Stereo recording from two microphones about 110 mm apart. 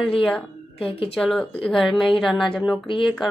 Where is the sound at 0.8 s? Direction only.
60° left (ahead or behind).